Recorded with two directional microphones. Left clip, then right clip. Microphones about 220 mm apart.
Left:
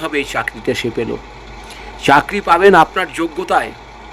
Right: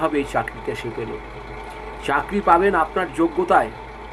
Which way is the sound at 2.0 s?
55° left (ahead or behind).